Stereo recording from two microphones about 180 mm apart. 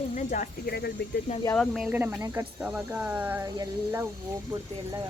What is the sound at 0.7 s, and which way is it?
Speech, 65° left (ahead or behind).